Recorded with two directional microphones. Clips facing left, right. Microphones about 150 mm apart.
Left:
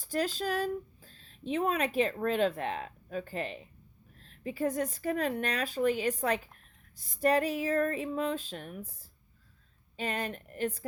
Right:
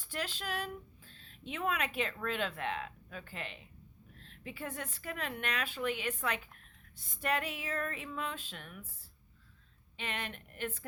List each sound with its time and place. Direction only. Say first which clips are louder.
0.0 s a woman's voice: left 9 dB; 40° left (ahead or behind)